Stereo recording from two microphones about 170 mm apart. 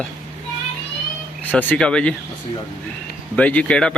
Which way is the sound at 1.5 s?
10° left (ahead or behind).